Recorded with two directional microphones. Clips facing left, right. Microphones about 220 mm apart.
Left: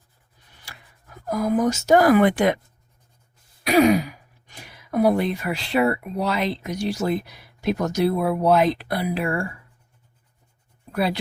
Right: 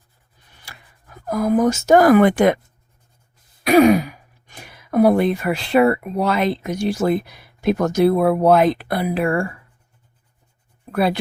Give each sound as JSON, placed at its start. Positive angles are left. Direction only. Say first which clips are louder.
{"t": 1.3, "sound": "speech", "louder": "right 4 dB", "side_deg": -55}
{"t": 3.6, "sound": "speech", "louder": "right 4 dB", "side_deg": -55}
{"t": 10.9, "sound": "speech", "louder": "right 4 dB", "side_deg": -55}